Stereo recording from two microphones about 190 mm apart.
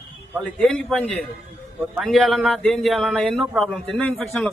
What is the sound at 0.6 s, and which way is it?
Speech, 5° left (ahead or behind).